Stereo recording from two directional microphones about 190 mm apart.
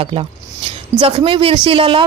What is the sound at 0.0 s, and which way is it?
A woman's voice, 30° right (ahead or behind).